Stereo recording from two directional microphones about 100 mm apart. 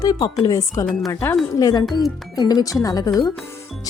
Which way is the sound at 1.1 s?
25° left (ahead or behind).